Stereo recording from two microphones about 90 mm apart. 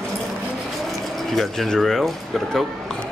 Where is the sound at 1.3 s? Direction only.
5° left (ahead or behind).